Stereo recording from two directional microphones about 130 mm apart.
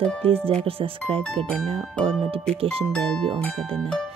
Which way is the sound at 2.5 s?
45° right (ahead or behind).